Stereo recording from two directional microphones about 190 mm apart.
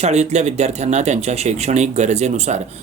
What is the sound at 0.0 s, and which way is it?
Speech, 35° right (ahead or behind).